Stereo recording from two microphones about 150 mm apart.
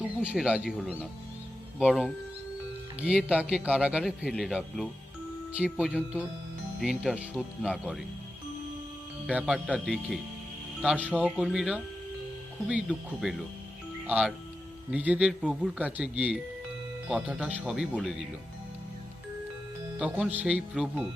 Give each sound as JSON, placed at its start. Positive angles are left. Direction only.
{"t": 0.0, "sound": "a man's voice", "side_deg": -10}
{"t": 9.7, "sound": "a man's voice", "side_deg": 0}
{"t": 20.0, "sound": "a man's voice", "side_deg": -10}